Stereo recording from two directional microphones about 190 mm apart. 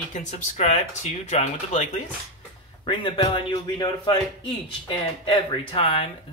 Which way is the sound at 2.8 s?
25° left (ahead or behind).